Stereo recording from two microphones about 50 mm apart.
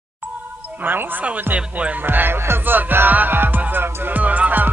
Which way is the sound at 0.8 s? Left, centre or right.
Right.